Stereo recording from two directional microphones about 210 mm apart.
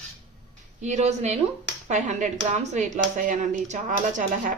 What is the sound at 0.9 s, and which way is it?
Speech, 35° right (ahead or behind).